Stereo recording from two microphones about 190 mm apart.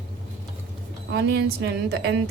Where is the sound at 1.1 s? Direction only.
60° right (ahead or behind).